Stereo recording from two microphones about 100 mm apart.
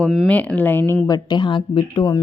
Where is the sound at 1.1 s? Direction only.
50° left (ahead or behind).